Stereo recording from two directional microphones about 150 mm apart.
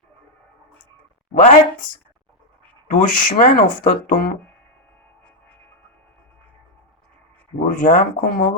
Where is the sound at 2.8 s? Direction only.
65° left (ahead or behind).